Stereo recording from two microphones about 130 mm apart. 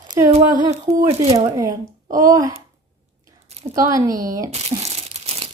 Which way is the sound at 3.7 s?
25° right (ahead or behind).